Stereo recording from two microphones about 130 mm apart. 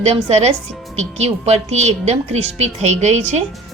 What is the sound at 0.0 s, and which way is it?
A woman's voice, 55° right (ahead or behind).